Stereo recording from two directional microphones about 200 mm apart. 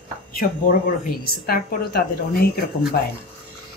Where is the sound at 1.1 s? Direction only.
50° left (ahead or behind).